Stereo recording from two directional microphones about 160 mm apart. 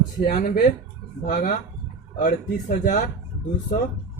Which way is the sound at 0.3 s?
55° left (ahead or behind).